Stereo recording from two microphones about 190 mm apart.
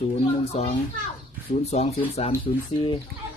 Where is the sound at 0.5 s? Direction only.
35° left (ahead or behind).